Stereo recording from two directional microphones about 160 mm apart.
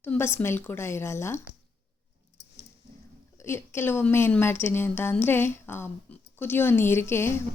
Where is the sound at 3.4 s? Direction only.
15° left (ahead or behind).